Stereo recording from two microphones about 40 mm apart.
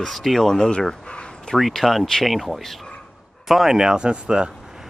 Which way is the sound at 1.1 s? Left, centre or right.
Left.